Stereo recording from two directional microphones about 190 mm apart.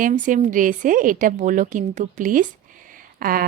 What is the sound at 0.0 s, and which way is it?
A woman's voice, 45° right (ahead or behind).